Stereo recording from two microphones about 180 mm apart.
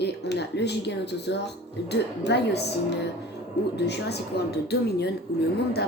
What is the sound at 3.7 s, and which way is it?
A woman's voice, 70° left (ahead or behind).